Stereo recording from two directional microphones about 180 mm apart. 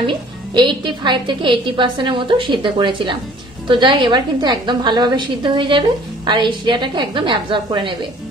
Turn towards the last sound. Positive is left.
turn(degrees=-25)  # may be behind; listen again after turning